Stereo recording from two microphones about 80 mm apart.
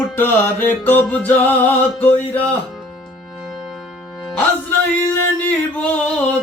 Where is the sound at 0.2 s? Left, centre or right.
Left.